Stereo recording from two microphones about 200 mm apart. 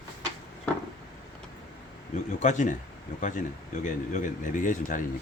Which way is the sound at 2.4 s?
40° left (ahead or behind).